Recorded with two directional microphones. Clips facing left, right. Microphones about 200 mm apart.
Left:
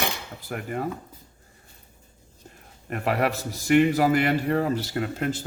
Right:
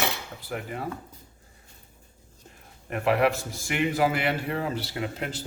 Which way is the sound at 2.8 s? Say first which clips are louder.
Right 2 dB; 40° left (ahead or behind).